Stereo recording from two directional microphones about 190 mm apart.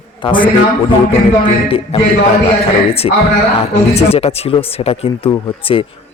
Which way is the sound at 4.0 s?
30° left (ahead or behind).